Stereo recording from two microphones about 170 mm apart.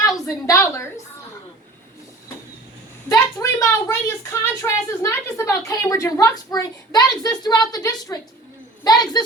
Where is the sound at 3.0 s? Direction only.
20° left (ahead or behind).